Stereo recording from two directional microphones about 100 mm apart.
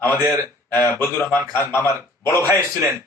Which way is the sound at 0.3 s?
20° left (ahead or behind).